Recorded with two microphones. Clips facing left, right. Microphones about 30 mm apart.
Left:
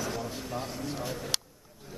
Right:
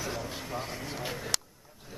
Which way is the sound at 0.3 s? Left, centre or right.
Centre.